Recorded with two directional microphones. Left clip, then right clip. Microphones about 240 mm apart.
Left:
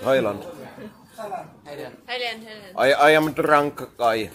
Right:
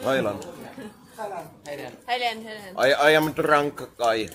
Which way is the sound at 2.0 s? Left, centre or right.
Right.